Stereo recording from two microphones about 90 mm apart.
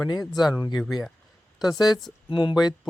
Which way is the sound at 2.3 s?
65° left (ahead or behind).